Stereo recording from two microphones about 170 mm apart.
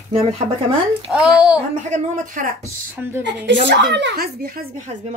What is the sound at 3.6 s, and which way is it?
Speech, 85° right.